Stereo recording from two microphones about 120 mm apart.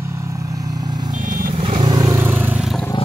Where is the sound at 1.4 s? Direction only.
50° right (ahead or behind).